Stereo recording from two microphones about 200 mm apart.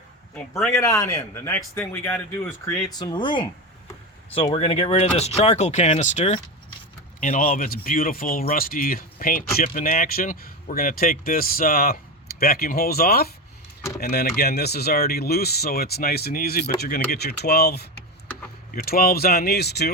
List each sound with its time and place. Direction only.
0.7 s a man's voice: 15° left (ahead or behind); by 19.9 s 55° left (ahead or behind)